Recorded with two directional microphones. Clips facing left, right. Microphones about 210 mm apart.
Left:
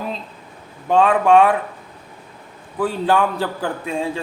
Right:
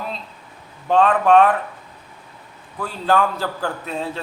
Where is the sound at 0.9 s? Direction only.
10° left (ahead or behind).